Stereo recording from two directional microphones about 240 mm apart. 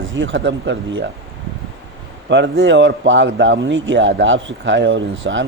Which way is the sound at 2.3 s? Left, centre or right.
Right.